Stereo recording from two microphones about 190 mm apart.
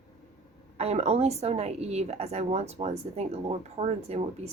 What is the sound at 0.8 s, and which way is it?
A woman's voice, 35° right (ahead or behind).